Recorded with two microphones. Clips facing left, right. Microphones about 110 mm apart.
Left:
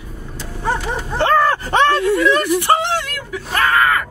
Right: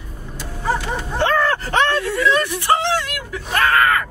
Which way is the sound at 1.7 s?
15° left (ahead or behind).